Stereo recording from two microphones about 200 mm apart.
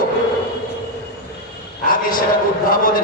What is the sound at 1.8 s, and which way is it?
A man's voice, 45° left (ahead or behind).